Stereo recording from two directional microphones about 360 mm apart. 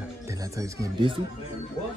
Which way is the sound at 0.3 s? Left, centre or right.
Centre.